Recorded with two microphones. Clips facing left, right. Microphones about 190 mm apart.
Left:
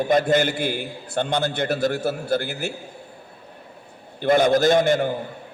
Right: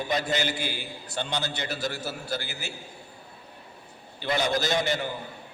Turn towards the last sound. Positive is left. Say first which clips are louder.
# left 9 dB
turn(degrees=50)  # may be behind; listen again after turning